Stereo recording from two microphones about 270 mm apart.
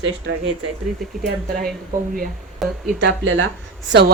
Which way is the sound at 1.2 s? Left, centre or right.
Right.